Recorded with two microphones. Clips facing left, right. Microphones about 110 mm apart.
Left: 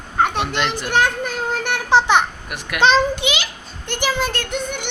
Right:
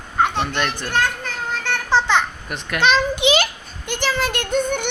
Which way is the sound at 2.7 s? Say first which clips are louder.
Left 3 dB; 30° left (ahead or behind).